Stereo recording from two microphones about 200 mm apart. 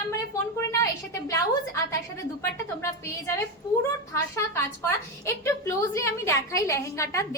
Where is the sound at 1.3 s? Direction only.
15° left (ahead or behind).